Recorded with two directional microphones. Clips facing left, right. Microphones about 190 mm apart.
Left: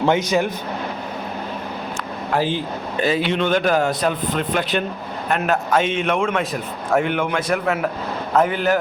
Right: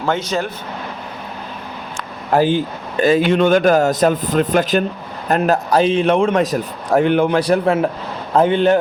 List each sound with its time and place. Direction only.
0.0 s speech: 15° left (ahead or behind)
2.3 s a man's voice: 50° right (ahead or behind); by 8.8 s 25° right (ahead or behind)